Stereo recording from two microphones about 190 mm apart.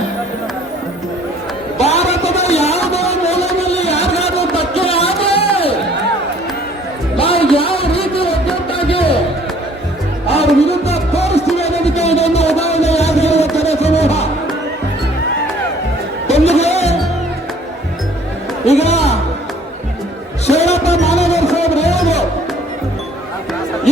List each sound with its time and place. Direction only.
1.8 s a sound: 35° left (ahead or behind)
3.6 s music: 35° left (ahead or behind)
7.2 s music: 30° left (ahead or behind)
10.2 s music: 30° left (ahead or behind)
11.5 s a sound: 35° left (ahead or behind)
16.2 s music: 35° left (ahead or behind)
18.6 s music: 35° left (ahead or behind)
20.5 s music: 35° left (ahead or behind)